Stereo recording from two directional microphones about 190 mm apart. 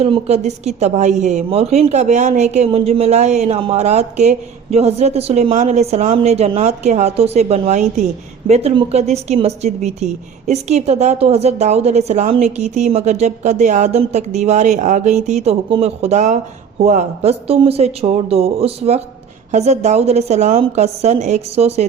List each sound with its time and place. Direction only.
0.0 s a woman's voice: 35° right (ahead or behind)